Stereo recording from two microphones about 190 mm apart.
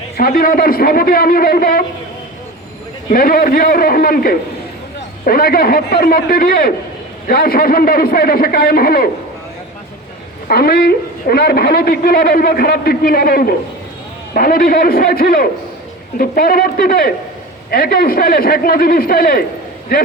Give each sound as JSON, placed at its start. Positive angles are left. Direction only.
{"t": 0.2, "sound": "a man's voice", "side_deg": 50}
{"t": 3.1, "sound": "a man's voice", "side_deg": 50}
{"t": 10.5, "sound": "a man's voice", "side_deg": 55}